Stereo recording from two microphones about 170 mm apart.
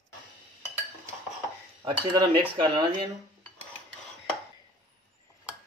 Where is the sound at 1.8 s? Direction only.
25° right (ahead or behind).